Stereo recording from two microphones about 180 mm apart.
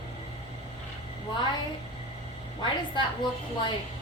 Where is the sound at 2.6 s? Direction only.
25° left (ahead or behind).